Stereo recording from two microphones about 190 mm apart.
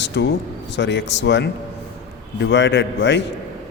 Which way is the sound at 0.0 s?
65° left (ahead or behind).